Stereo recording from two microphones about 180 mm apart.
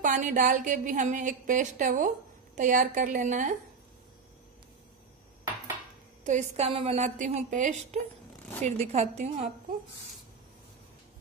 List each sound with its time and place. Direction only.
0.0 s a woman's voice: 45° right (ahead or behind)
6.2 s a woman's voice: 40° right (ahead or behind)